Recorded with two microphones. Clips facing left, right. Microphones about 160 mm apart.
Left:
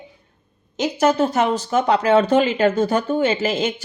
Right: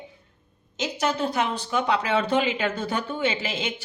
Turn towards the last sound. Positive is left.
turn(degrees=45)  # may be behind; listen again after turning